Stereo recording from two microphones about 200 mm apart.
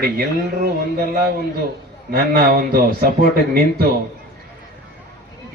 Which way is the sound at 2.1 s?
45° right (ahead or behind).